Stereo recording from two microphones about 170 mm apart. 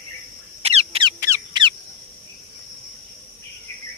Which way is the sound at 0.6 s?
35° right (ahead or behind).